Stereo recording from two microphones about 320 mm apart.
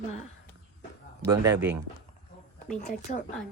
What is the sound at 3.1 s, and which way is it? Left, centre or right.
Speech, left.